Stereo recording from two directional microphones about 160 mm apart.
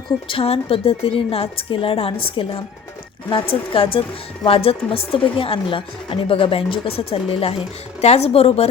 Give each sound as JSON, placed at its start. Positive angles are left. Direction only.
{"t": 0.3, "sound": "a woman's voice", "side_deg": 35}